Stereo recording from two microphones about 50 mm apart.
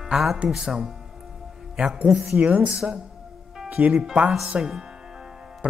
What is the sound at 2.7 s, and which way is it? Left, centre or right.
Speech, centre.